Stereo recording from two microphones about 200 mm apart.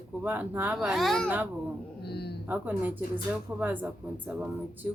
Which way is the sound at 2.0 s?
55° left (ahead or behind).